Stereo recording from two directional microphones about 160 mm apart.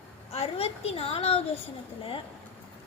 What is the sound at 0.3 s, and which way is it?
A woman's voice, 40° left (ahead or behind).